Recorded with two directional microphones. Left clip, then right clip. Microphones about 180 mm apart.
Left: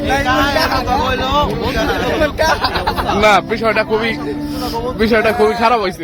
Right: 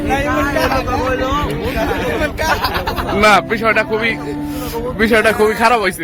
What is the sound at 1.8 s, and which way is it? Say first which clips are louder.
Speech: left 2 dB; 55° left (ahead or behind).